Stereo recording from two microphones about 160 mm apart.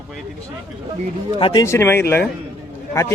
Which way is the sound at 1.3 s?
35° left (ahead or behind).